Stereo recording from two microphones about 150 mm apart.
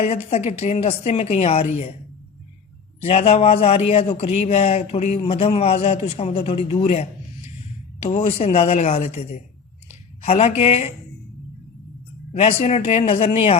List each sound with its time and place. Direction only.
0.3 s a man's voice: 45° left (ahead or behind)
3.0 s a man's voice: 45° left (ahead or behind)
12.3 s a man's voice: 45° left (ahead or behind)